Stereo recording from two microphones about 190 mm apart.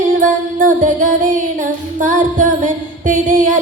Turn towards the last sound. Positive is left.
turn(degrees=-40)  # may be behind; listen again after turning